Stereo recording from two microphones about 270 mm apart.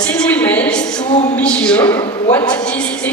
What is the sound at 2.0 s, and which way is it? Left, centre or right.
A man's voice, centre.